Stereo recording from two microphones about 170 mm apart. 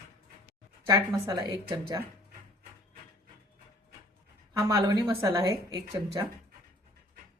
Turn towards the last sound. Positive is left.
turn(degrees=-25)  # may be behind; listen again after turning